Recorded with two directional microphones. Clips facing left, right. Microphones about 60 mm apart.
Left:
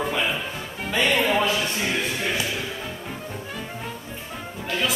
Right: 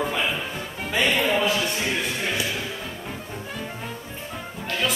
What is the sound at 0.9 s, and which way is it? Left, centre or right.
Music, centre.